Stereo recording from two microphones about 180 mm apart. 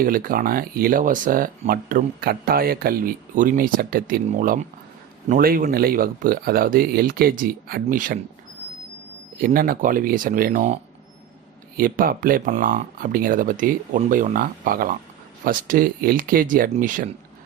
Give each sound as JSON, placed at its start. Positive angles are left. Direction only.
{"t": 0.0, "sound": "speech", "side_deg": -50}
{"t": 9.4, "sound": "speech", "side_deg": -50}
{"t": 11.8, "sound": "speech", "side_deg": -50}